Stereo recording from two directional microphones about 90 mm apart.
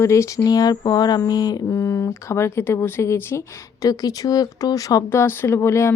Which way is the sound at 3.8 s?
40° left (ahead or behind).